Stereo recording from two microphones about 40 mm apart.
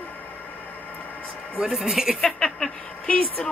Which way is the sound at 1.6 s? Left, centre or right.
Centre.